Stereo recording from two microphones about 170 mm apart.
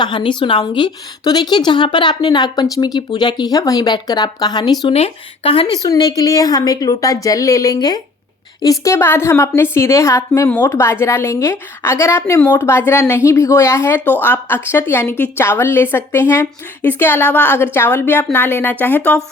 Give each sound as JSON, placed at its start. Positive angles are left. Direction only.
{"t": 0.0, "sound": "a woman's voice", "side_deg": 30}
{"t": 5.8, "sound": "a woman's voice", "side_deg": 20}